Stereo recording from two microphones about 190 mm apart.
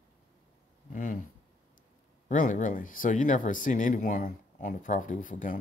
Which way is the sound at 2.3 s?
40° left (ahead or behind).